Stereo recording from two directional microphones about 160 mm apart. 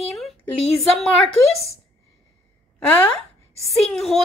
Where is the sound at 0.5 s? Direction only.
40° left (ahead or behind).